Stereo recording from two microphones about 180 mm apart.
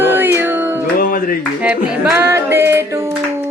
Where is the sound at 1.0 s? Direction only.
50° left (ahead or behind).